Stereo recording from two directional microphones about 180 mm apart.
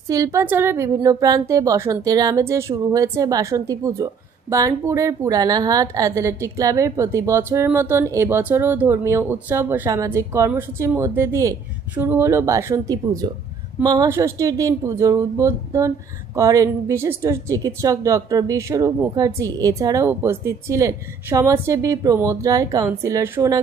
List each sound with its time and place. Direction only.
0.1 s a woman's voice: 15° right (ahead or behind)